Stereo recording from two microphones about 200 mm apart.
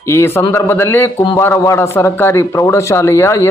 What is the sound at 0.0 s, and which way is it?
A man's voice, 10° left (ahead or behind).